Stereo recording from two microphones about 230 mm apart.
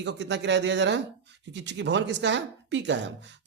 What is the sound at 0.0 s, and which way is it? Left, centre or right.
Speech, right.